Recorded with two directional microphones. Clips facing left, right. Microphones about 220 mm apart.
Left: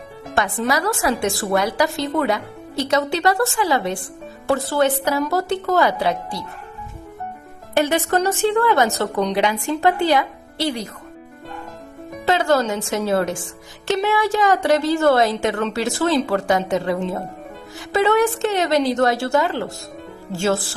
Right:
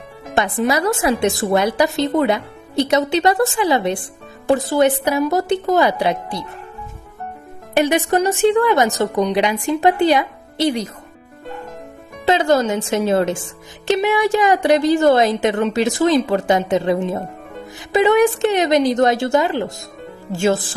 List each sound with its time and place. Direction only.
0.3 s a woman's voice: 20° right (ahead or behind)
7.7 s a woman's voice: 15° right (ahead or behind)
12.2 s a woman's voice: 20° right (ahead or behind)